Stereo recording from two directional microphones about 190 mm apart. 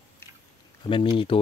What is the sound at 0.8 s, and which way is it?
Speech, 25° left (ahead or behind).